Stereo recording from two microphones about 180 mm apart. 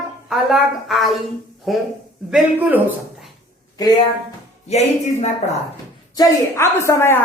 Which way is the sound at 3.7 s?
20° left (ahead or behind).